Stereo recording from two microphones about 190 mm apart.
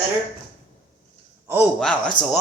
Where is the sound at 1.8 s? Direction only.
5° left (ahead or behind).